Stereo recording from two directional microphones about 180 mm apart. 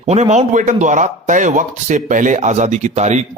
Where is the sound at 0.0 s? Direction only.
35° right (ahead or behind).